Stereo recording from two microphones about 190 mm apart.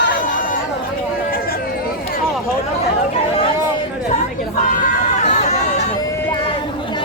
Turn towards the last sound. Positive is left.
turn(degrees=35)  # may be behind; listen again after turning